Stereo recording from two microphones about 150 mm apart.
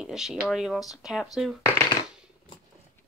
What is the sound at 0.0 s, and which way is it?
Speech, 5° right (ahead or behind).